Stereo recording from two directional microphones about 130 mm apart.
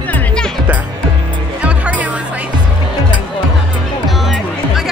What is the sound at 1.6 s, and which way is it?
Music, 10° right (ahead or behind).